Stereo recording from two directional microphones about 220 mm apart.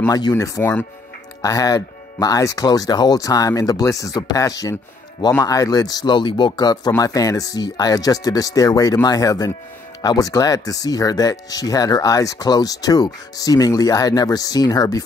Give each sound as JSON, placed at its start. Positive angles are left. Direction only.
{"t": 0.0, "sound": "speech", "side_deg": 15}